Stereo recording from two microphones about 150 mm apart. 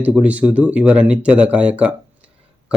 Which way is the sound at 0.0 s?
10° right (ahead or behind).